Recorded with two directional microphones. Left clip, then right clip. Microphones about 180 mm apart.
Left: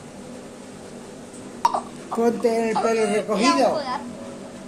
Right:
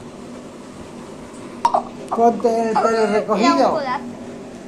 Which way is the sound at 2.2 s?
45° left (ahead or behind).